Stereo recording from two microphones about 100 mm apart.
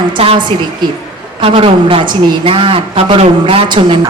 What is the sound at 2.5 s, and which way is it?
Speech, 65° right (ahead or behind).